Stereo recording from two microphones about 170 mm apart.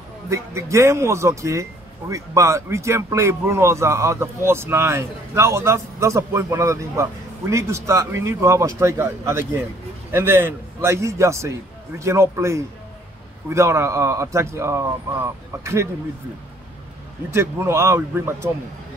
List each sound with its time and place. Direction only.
0.3 s speech: 15° right (ahead or behind)
17.3 s speech: 15° right (ahead or behind)